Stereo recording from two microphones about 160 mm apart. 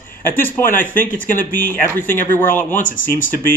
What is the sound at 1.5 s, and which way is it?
Speech, 15° left (ahead or behind).